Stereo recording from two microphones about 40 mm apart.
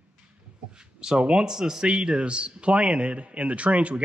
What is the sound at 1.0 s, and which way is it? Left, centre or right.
Speech, right.